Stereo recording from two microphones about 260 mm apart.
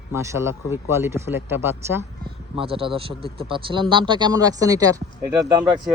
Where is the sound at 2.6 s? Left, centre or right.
Right.